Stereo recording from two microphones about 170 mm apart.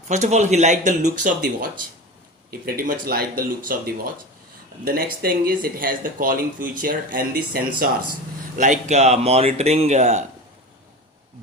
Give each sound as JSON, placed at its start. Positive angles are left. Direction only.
{"t": 0.1, "sound": "a man's voice", "side_deg": -40}
{"t": 1.0, "sound": "speech", "side_deg": -55}
{"t": 2.5, "sound": "speech", "side_deg": -60}
{"t": 8.5, "sound": "speech", "side_deg": -45}